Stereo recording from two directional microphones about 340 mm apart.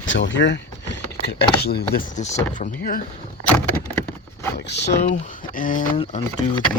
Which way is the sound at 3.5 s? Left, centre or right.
Centre.